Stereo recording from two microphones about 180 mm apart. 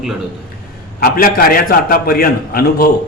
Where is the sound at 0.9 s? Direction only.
55° left (ahead or behind).